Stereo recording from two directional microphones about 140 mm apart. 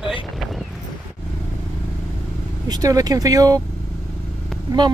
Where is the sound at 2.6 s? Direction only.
25° right (ahead or behind).